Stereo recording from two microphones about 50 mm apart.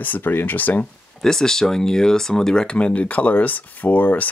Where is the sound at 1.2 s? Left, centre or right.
Centre.